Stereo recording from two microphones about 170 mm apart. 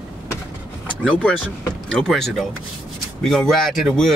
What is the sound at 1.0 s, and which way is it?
Speech, 5° left (ahead or behind).